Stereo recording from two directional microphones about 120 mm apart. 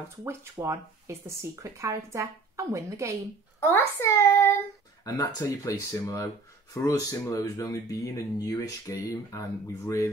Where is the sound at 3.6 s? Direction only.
20° left (ahead or behind).